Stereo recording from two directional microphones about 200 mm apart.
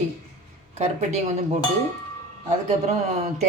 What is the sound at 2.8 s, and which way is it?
Speech, 35° right (ahead or behind).